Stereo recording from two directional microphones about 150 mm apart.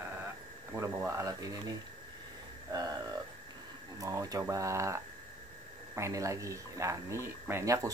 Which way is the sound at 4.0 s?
25° right (ahead or behind).